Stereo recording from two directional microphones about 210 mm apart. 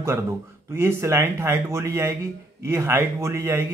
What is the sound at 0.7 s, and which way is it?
A man's voice, 10° right (ahead or behind).